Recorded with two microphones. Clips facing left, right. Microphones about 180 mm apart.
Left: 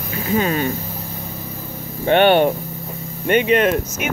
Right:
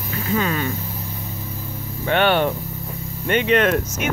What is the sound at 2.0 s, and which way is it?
Speech, 20° left (ahead or behind).